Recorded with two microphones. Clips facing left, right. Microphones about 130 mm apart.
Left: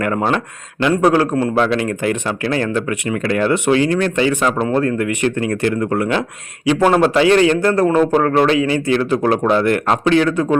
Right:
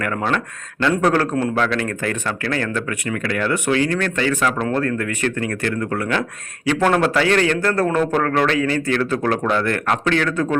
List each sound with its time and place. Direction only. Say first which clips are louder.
0.0 s speech: left 4 dB; 25° left (ahead or behind)
0.8 s a man's voice: left 4 dB; 15° left (ahead or behind)